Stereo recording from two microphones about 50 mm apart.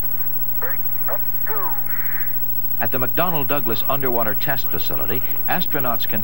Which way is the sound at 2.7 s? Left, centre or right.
Centre.